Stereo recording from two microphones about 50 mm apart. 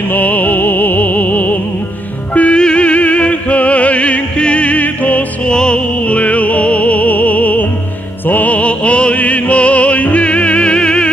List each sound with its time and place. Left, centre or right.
0.1 s music: left
2.3 s music: left
5.5 s music: centre